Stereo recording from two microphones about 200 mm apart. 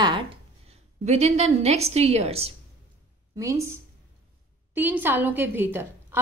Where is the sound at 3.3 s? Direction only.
15° right (ahead or behind).